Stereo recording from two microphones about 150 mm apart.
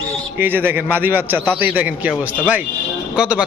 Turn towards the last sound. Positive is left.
turn(degrees=-5)  # may be behind; listen again after turning